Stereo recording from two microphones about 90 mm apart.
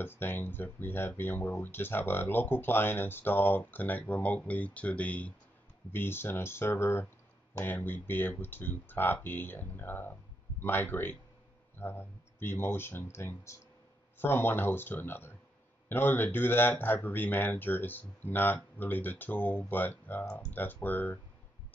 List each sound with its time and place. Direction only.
0.0 s speech: 25° left (ahead or behind)